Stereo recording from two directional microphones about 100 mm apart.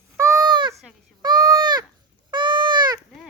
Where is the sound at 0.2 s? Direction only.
30° right (ahead or behind).